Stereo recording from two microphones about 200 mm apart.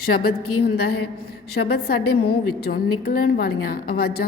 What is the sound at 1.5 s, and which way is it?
A woman's voice, 50° left (ahead or behind).